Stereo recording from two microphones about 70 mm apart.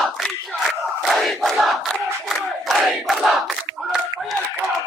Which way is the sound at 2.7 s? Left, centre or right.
Centre.